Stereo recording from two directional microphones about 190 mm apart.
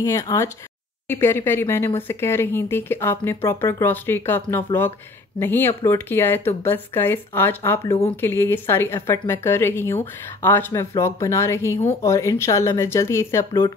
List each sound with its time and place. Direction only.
0.0 s speech: 15° left (ahead or behind)